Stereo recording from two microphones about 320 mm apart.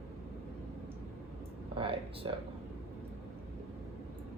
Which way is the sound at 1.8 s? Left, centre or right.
Centre.